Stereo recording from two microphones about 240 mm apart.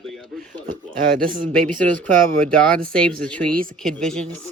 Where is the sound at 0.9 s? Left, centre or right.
Right.